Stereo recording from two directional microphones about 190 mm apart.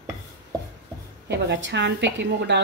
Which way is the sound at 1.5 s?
65° right (ahead or behind).